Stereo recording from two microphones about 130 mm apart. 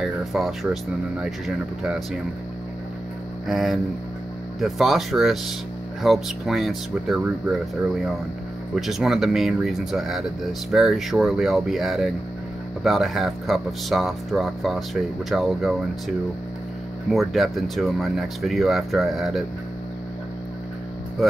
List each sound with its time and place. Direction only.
0.0 s speech: centre (ahead or behind)
3.4 s speech: centre (ahead or behind)
8.7 s speech: centre (ahead or behind)